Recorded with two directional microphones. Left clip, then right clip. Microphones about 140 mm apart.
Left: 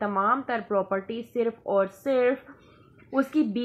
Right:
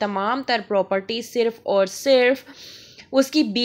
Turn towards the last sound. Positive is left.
turn(degrees=-30)  # may be behind; listen again after turning